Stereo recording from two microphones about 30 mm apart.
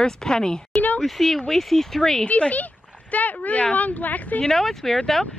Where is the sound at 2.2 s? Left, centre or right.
Left.